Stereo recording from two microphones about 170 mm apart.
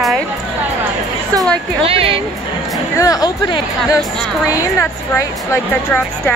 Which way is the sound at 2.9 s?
20° left (ahead or behind).